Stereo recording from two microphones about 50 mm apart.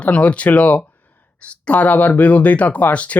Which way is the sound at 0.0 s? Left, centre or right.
Left.